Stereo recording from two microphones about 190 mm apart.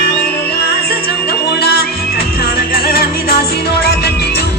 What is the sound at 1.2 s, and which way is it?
Music, 55° left (ahead or behind).